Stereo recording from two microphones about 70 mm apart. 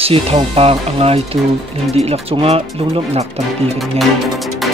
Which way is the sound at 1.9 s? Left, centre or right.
Centre.